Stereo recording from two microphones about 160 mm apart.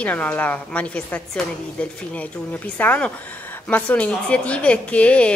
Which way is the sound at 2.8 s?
10° left (ahead or behind).